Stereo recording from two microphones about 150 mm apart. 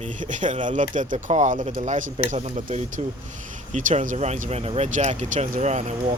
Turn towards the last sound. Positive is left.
turn(degrees=-50)  # may be behind; listen again after turning